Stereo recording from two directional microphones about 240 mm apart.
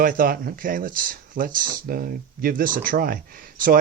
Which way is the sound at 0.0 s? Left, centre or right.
Right.